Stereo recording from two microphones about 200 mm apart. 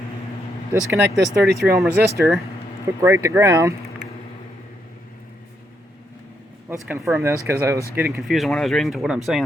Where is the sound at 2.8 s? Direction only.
15° right (ahead or behind).